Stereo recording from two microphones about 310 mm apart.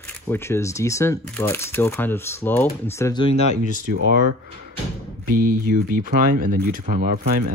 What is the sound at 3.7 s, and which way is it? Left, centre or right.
Speech, right.